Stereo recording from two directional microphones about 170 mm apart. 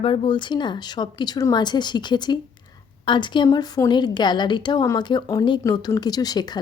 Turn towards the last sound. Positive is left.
turn(degrees=25)  # may be behind; listen again after turning